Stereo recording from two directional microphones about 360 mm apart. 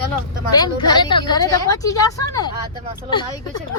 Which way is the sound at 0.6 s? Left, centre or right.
Centre.